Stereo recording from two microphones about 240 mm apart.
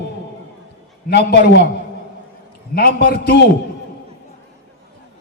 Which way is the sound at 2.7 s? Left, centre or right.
Left.